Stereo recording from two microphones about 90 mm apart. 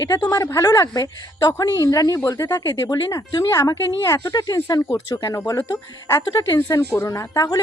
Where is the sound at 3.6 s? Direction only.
30° left (ahead or behind).